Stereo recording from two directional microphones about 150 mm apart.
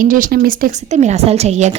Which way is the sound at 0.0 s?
65° right (ahead or behind).